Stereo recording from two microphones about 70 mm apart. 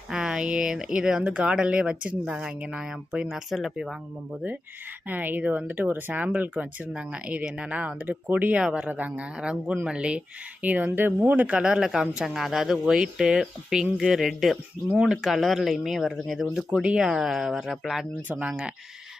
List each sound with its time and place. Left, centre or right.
0.1 s speech: centre
5.0 s speech: right; by 18.0 s centre
18.3 s speech: centre